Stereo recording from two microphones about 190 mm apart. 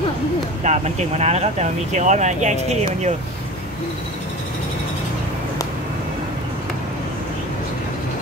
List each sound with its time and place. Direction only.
0.7 s speech: 35° right (ahead or behind)